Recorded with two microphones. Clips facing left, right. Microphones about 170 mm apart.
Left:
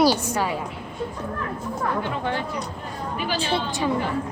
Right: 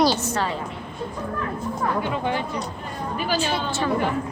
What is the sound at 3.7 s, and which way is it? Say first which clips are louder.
Speech: even; 15° left (ahead or behind).